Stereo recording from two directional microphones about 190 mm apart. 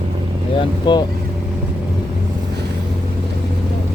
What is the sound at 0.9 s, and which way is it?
Speech, 25° left (ahead or behind).